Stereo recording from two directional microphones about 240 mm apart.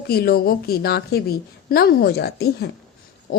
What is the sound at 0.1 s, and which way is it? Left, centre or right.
A woman's voice, left.